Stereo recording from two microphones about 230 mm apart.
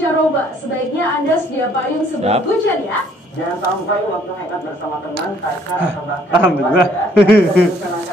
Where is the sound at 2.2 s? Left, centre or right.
Right.